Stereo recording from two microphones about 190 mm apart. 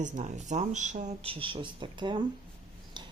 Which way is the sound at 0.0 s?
40° right (ahead or behind).